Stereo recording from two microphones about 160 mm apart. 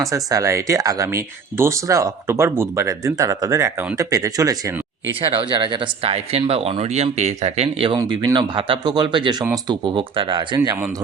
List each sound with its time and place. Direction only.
0.1 s speech: 20° right (ahead or behind); by 7.9 s 40° right (ahead or behind)
7.9 s speech: 25° right (ahead or behind)